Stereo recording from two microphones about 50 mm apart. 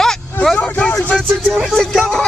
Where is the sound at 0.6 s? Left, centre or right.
Left.